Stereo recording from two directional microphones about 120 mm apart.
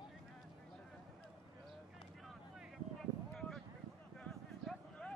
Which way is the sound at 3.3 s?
5° left (ahead or behind).